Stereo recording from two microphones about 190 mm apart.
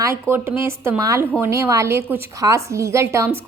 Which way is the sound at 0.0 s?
15° right (ahead or behind).